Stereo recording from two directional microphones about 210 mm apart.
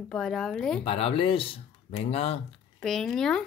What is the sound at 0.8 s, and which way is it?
Speech, 25° left (ahead or behind).